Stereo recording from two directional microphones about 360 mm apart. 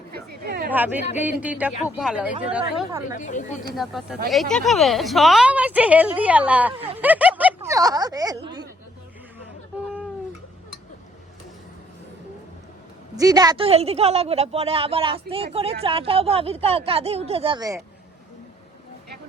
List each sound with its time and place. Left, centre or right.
0.1 s a sound: right
0.7 s a woman's voice: centre
3.2 s a woman's voice: left
3.8 s a woman's voice: centre
6.7 s a woman's voice: centre
7.0 s speech: centre
13.1 s a woman's voice: centre